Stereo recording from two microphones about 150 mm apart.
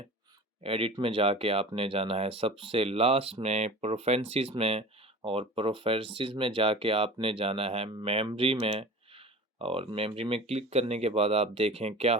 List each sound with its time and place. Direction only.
0.6 s speech: 40° right (ahead or behind)